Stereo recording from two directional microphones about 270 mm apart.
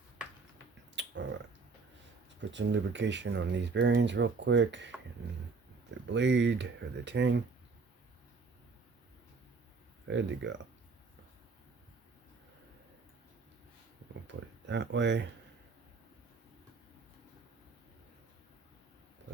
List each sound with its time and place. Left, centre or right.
0.9 s finger snapping: right
2.4 s speech: right
6.1 s speech: right
10.1 s speech: right
14.3 s speech: right